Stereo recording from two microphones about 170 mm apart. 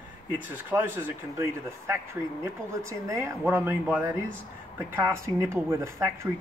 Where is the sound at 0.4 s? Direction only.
10° right (ahead or behind).